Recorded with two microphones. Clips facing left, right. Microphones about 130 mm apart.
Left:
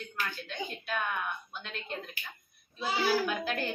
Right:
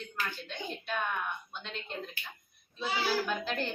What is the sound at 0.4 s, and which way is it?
Speech, centre (ahead or behind).